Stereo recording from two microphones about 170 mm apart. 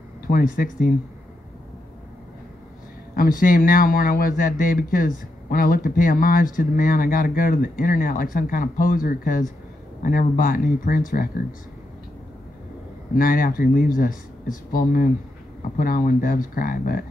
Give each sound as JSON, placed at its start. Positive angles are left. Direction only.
{"t": 0.3, "sound": "speech", "side_deg": 55}
{"t": 3.2, "sound": "speech", "side_deg": 55}
{"t": 13.1, "sound": "speech", "side_deg": 55}